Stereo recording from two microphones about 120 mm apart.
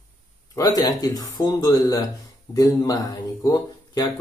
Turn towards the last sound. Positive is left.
turn(degrees=35)  # may be behind; listen again after turning